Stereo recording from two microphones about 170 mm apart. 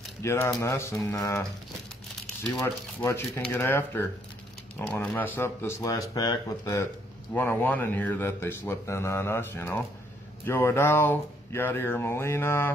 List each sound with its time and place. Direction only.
0.2 s speech: 15° left (ahead or behind)
2.5 s speech: 15° left (ahead or behind)